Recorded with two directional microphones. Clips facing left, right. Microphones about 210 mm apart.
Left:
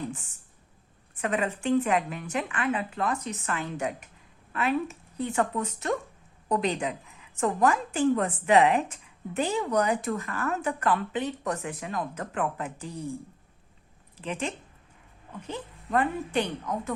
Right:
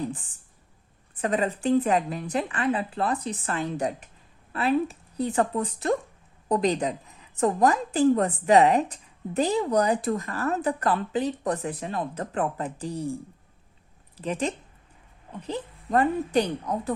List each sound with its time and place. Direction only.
1.1 s a woman's voice: 35° right (ahead or behind)
14.2 s a woman's voice: 40° right (ahead or behind)